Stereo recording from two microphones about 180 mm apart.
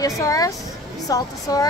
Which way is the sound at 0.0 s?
20° left (ahead or behind).